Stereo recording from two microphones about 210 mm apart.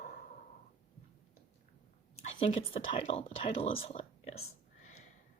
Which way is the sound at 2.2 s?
30° left (ahead or behind).